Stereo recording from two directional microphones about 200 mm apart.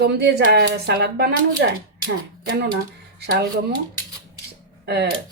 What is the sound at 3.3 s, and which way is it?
Speech, 50° right (ahead or behind).